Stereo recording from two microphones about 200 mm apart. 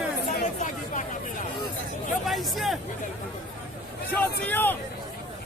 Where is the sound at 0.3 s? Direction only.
40° left (ahead or behind).